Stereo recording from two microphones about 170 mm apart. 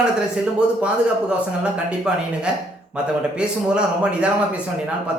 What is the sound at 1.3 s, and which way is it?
A woman's voice, 5° right (ahead or behind).